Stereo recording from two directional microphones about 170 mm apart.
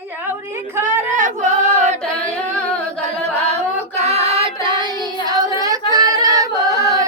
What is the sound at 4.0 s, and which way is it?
Music, 40° right (ahead or behind).